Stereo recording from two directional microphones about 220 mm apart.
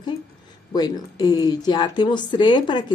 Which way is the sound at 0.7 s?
20° left (ahead or behind).